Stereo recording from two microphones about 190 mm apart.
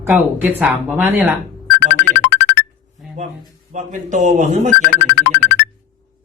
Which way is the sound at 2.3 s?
70° left (ahead or behind).